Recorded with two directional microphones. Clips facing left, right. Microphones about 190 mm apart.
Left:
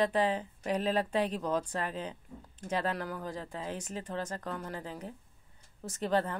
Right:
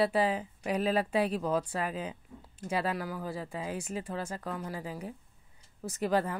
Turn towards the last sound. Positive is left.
turn(degrees=-10)  # may be behind; listen again after turning